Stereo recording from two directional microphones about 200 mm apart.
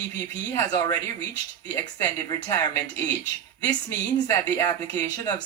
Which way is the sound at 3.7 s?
15° left (ahead or behind).